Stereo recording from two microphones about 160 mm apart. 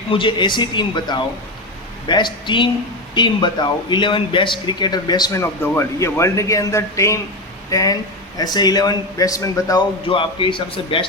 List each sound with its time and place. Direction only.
0.1 s speech: 30° left (ahead or behind)